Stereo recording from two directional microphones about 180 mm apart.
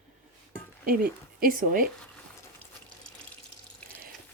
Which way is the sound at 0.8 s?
50° right (ahead or behind).